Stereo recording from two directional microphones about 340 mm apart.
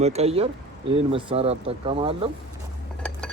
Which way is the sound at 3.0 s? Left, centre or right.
Centre.